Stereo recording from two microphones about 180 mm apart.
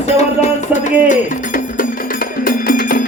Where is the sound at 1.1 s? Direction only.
45° left (ahead or behind).